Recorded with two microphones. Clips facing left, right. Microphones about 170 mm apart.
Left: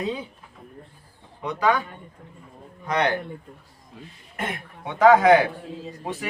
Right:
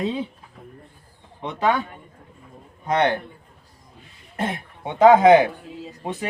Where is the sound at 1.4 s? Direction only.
25° right (ahead or behind).